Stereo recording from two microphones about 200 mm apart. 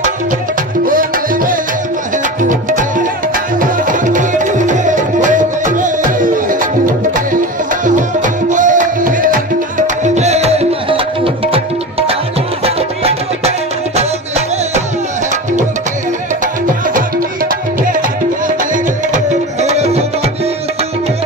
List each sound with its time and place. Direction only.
0.8 s music: 45° right (ahead or behind)
3.5 s music: 40° right (ahead or behind)
8.5 s music: 40° right (ahead or behind)
12.6 s music: 30° right (ahead or behind)
19.1 s music: 35° right (ahead or behind)